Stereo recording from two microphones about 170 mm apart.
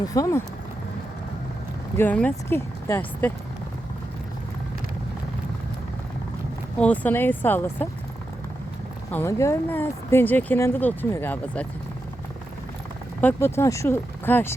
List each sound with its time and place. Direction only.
0.0 s speech: 20° left (ahead or behind)
2.0 s speech: 10° left (ahead or behind)
6.7 s speech: 10° left (ahead or behind)
9.1 s speech: 15° left (ahead or behind)
13.2 s speech: 15° left (ahead or behind)